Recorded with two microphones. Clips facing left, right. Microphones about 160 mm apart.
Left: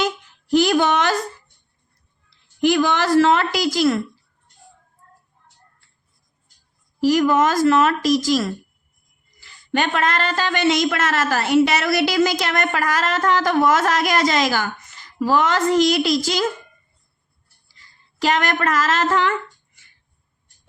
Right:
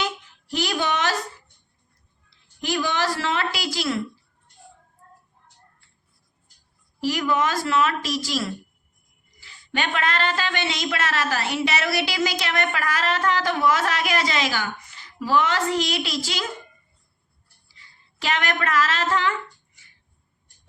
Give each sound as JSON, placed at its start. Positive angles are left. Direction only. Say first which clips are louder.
{"t": 0.5, "sound": "a sound", "louder": "left 9 dB", "side_deg": 50}
{"t": 2.6, "sound": "a man's voice", "louder": "left 7 dB", "side_deg": 55}
{"t": 7.0, "sound": "a man's voice", "louder": "left 7 dB", "side_deg": 45}
{"t": 17.7, "sound": "speech", "louder": "left 1 dB", "side_deg": 40}